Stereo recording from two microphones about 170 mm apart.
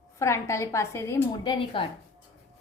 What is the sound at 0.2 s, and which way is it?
A woman's voice, 15° left (ahead or behind).